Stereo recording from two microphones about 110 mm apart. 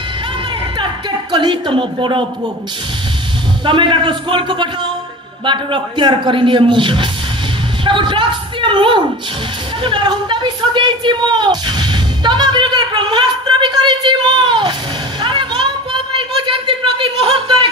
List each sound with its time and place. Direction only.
1.3 s a man's voice: 45° right (ahead or behind)
3.6 s a man's voice: 50° right (ahead or behind)
15.2 s a sound: 45° right (ahead or behind)